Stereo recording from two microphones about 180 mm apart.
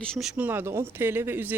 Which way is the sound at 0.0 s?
Centre (ahead or behind).